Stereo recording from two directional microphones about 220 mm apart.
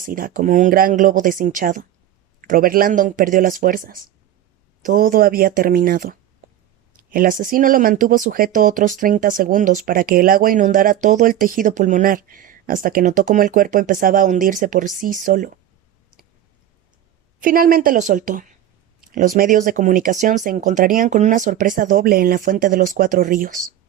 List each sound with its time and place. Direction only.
0.0 s speech: 40° right (ahead or behind)
17.4 s speech: 40° right (ahead or behind)